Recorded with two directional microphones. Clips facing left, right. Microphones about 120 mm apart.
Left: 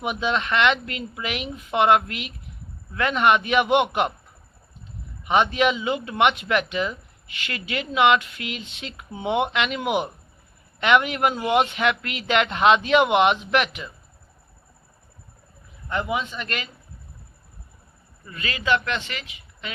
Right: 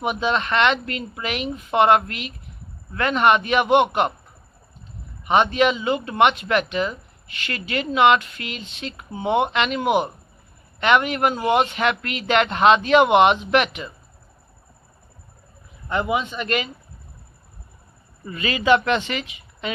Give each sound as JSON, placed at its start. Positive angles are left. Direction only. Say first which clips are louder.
{"t": 0.1, "sound": "speech", "louder": "right 1 dB", "side_deg": 10}
{"t": 5.3, "sound": "speech", "louder": "right 2 dB", "side_deg": 5}
{"t": 16.4, "sound": "speech", "louder": "right 7 dB", "side_deg": -10}
{"t": 18.3, "sound": "speech", "louder": "right 6 dB", "side_deg": -15}